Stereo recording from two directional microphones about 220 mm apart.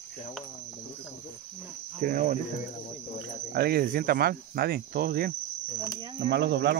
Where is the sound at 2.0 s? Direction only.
35° right (ahead or behind).